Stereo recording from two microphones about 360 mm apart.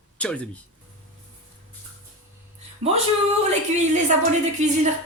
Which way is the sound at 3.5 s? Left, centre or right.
Centre.